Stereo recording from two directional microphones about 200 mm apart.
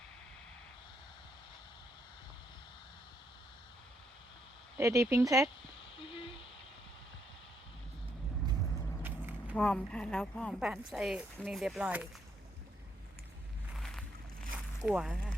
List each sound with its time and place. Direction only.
4.8 s speech: 15° right (ahead or behind)
6.1 s a sound: 25° left (ahead or behind)
9.0 s a sound: 10° right (ahead or behind)
9.6 s speech: 5° left (ahead or behind)
13.7 s vehicle: centre (ahead or behind)
14.8 s speech: 5° right (ahead or behind)